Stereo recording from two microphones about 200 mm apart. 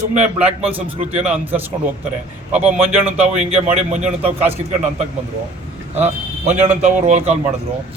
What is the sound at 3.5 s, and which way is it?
Speech, 35° right (ahead or behind).